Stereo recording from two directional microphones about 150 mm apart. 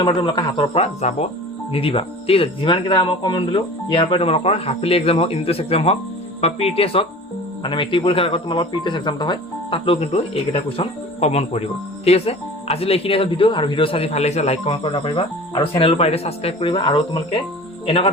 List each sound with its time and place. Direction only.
0.0 s speech: 35° left (ahead or behind)